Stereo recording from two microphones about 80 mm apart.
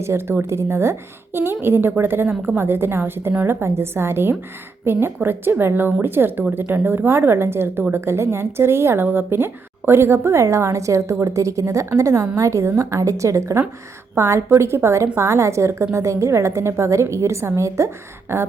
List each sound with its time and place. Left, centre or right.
0.0 s a woman's voice: right